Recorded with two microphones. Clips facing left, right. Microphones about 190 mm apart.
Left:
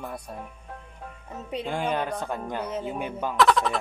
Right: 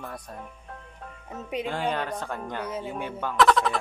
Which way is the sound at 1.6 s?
15° left (ahead or behind).